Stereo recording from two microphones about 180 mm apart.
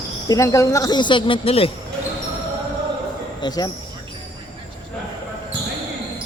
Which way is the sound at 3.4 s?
20° left (ahead or behind).